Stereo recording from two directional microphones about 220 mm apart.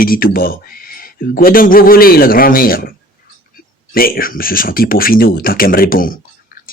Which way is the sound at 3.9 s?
40° left (ahead or behind).